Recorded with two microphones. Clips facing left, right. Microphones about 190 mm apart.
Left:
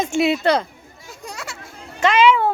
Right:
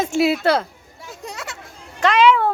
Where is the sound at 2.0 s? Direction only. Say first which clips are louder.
Even; centre (ahead or behind).